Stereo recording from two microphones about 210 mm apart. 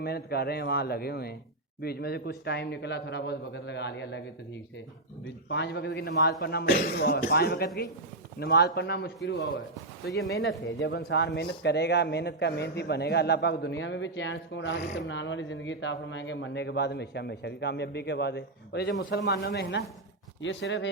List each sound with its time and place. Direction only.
0.0 s a man's voice: 50° left (ahead or behind)
5.5 s a man's voice: 55° left (ahead or behind)
10.8 s a man's voice: 55° left (ahead or behind)